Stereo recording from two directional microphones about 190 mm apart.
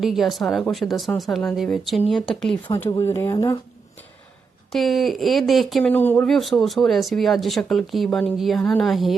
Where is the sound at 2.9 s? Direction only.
15° left (ahead or behind).